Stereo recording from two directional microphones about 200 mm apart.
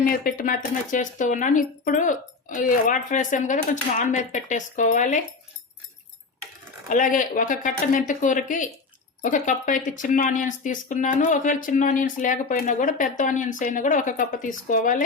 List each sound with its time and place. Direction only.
0.1 s speech: 45° left (ahead or behind)
6.8 s speech: 40° left (ahead or behind)